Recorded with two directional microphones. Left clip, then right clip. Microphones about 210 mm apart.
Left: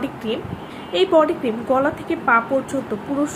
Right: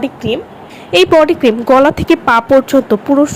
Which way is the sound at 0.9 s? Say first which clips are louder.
Right 8 dB; 40° right (ahead or behind).